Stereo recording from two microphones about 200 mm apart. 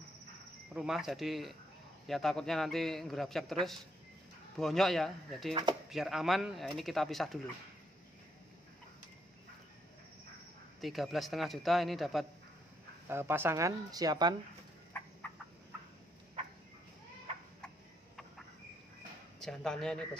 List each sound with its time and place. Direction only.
0.7 s a man's voice: centre (ahead or behind)
4.6 s a man's voice: centre (ahead or behind)
5.5 s speech: 20° right (ahead or behind)
5.9 s a man's voice: centre (ahead or behind)
10.8 s a man's voice: centre (ahead or behind)
13.1 s speech: 10° right (ahead or behind)
19.4 s a man's voice: 5° left (ahead or behind)